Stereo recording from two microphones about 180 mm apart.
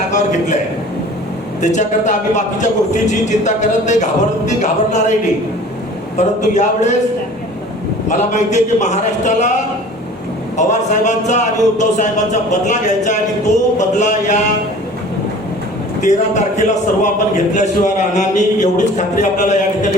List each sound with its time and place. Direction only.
0.1 s a sound: 40° left (ahead or behind)
1.6 s a man's voice: 40° left (ahead or behind)
6.1 s a man's voice: 40° left (ahead or behind)
8.1 s a man's voice: 40° left (ahead or behind)
10.6 s a man's voice: 40° left (ahead or behind)
16.0 s a man's voice: 40° left (ahead or behind)